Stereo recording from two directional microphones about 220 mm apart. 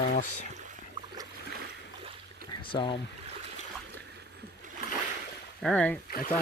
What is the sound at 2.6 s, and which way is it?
Speech, 25° left (ahead or behind).